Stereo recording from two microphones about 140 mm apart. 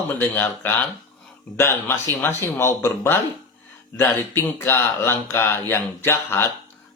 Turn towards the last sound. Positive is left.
turn(degrees=15)  # may be behind; listen again after turning